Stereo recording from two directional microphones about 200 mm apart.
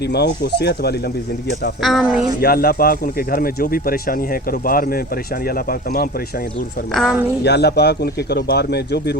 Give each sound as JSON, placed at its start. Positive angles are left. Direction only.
{"t": 0.1, "sound": "a man's voice", "side_deg": 55}
{"t": 1.8, "sound": "speech", "side_deg": 0}
{"t": 2.4, "sound": "speech", "side_deg": 50}
{"t": 6.9, "sound": "speech", "side_deg": -5}
{"t": 7.4, "sound": "a man's voice", "side_deg": 55}